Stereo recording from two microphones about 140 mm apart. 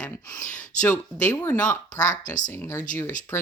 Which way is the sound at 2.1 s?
65° left (ahead or behind).